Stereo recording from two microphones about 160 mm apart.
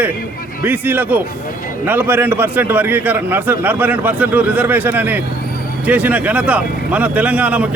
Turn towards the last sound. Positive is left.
turn(degrees=-10)  # may be behind; listen again after turning